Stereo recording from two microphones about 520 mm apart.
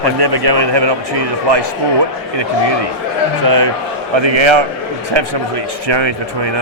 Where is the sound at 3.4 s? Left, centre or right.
Right.